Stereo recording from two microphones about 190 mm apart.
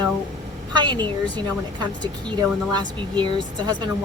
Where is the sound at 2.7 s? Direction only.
25° right (ahead or behind).